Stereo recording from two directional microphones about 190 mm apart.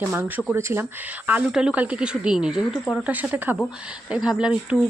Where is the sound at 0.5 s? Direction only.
10° right (ahead or behind).